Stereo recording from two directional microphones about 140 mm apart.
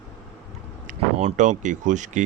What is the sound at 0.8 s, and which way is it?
Speech, 60° right (ahead or behind).